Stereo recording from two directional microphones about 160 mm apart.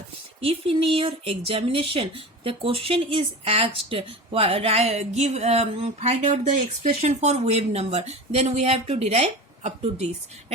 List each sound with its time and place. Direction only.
0.4 s speech: 35° right (ahead or behind)